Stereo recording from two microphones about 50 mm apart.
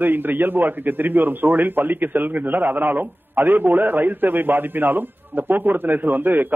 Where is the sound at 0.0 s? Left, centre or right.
Right.